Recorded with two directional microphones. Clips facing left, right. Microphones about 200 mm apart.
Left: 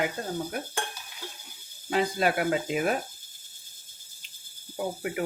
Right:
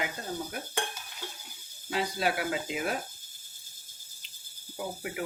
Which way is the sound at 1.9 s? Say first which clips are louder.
Left 4 dB; 55° left (ahead or behind).